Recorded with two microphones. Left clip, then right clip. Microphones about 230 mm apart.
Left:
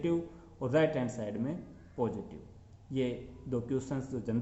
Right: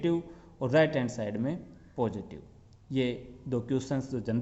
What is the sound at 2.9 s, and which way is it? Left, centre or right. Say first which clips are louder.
A man's voice: right 3 dB; right.